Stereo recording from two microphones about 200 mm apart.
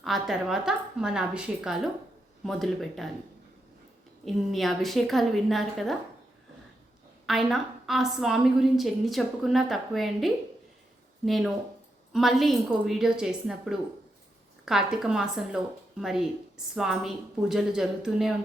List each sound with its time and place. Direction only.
0.0 s a woman's voice: centre (ahead or behind)
4.3 s a woman's voice: centre (ahead or behind)
7.3 s a woman's voice: centre (ahead or behind)